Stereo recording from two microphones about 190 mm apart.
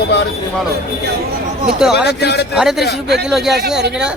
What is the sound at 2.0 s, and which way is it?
Speech, 60° left (ahead or behind).